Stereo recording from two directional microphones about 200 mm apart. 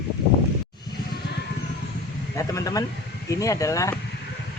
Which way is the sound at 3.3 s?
15° left (ahead or behind).